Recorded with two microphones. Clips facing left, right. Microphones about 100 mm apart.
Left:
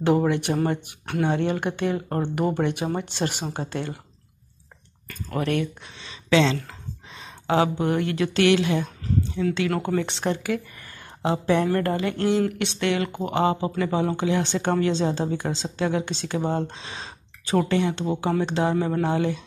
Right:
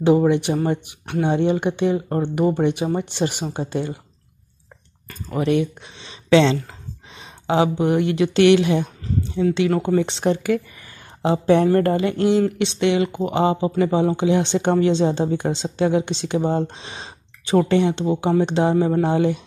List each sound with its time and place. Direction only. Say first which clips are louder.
0.0 s speech: right 5 dB; 10° right (ahead or behind)
1.2 s speech: right 5 dB; 15° right (ahead or behind)
5.3 s speech: right 5 dB; 15° right (ahead or behind)
6.3 s speech: right 5 dB; 30° right (ahead or behind)
7.2 s speech: right 3 dB; 20° right (ahead or behind)
9.7 s speech: right 5 dB; 5° right (ahead or behind)
11.4 s speech: right 7 dB; 30° right (ahead or behind)